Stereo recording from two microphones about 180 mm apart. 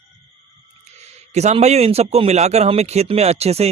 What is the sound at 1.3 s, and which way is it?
A man's voice, 40° right (ahead or behind).